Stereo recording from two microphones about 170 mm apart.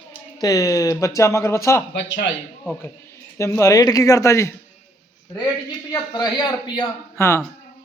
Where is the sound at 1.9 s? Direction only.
90° left.